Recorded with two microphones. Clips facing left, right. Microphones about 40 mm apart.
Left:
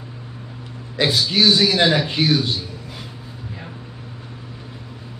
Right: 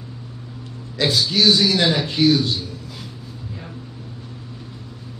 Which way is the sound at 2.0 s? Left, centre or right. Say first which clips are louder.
Right 2 dB; left.